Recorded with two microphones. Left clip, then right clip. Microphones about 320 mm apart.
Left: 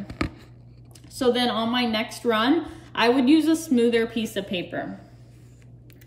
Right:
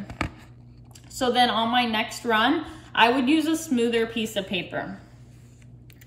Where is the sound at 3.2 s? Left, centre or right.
Left.